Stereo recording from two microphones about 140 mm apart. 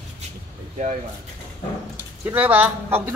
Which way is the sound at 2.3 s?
10° right (ahead or behind).